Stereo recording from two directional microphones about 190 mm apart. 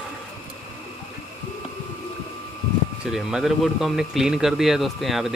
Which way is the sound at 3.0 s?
5° right (ahead or behind).